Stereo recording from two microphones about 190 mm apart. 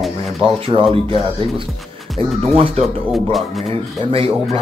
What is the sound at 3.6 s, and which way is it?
Speech, 30° right (ahead or behind).